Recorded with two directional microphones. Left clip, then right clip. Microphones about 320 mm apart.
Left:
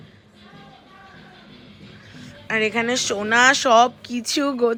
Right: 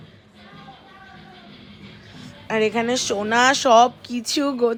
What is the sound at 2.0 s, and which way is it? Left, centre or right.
Speech, centre.